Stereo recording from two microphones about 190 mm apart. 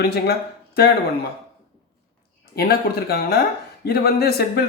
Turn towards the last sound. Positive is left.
turn(degrees=55)  # may be behind; listen again after turning